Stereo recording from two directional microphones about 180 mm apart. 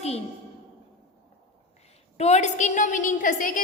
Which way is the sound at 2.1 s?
35° left (ahead or behind).